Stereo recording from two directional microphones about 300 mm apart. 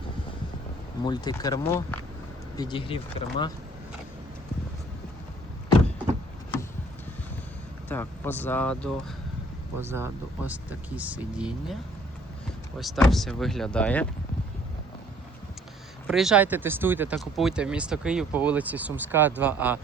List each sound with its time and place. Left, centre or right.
1.0 s speech: centre
7.9 s speech: centre
9.7 s speech: centre
12.8 s speech: centre
16.0 s speech: centre